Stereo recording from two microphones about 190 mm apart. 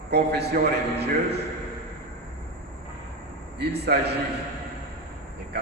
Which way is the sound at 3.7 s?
60° right (ahead or behind).